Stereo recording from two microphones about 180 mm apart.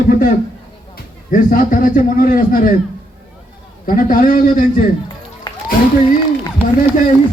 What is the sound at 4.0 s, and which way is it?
Speech, 50° left (ahead or behind).